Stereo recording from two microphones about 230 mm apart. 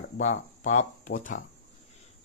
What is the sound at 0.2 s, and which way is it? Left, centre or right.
Speech, left.